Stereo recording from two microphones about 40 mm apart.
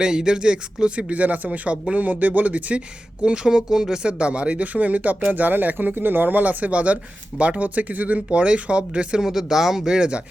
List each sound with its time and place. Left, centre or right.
0.0 s speech: centre
3.2 s speech: right
9.2 s speech: centre